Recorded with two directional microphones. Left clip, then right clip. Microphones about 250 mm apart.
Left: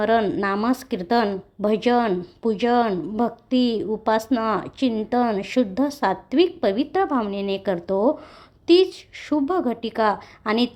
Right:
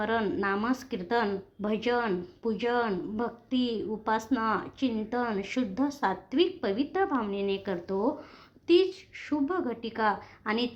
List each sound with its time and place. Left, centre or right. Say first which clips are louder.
0.0 s a woman's voice: left 9 dB; left